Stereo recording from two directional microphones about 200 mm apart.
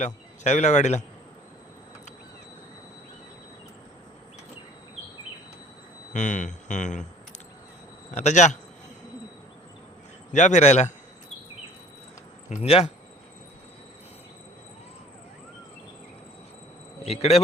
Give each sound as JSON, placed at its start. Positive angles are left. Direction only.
{"t": 0.0, "sound": "speech", "side_deg": 35}
{"t": 6.1, "sound": "speech", "side_deg": 35}
{"t": 8.1, "sound": "speech", "side_deg": 35}
{"t": 10.3, "sound": "speech", "side_deg": 35}
{"t": 12.5, "sound": "speech", "side_deg": 30}
{"t": 17.1, "sound": "speech", "side_deg": 30}